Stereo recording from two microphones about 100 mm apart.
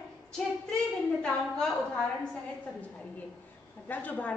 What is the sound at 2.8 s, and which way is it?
A woman's voice, 15° left (ahead or behind).